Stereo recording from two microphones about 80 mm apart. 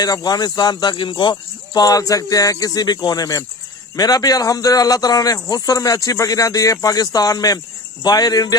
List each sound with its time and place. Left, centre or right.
0.0 s speech: left
1.3 s speech: left